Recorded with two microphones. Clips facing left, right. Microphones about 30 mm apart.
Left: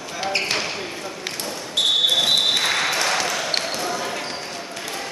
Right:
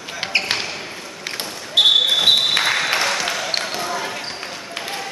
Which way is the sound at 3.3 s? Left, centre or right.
Centre.